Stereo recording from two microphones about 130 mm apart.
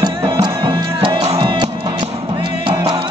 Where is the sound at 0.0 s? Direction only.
35° right (ahead or behind).